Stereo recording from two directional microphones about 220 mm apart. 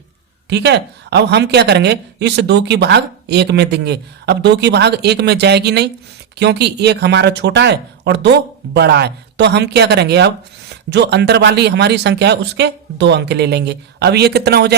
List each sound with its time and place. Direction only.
0.5 s speech: 50° right (ahead or behind)